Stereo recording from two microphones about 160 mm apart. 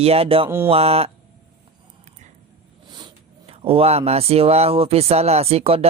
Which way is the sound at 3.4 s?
35° right (ahead or behind).